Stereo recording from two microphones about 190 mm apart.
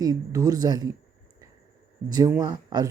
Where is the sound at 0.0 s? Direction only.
20° right (ahead or behind).